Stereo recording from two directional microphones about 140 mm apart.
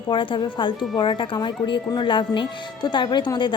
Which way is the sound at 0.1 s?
35° left (ahead or behind).